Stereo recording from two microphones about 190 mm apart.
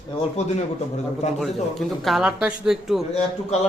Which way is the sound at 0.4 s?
35° left (ahead or behind).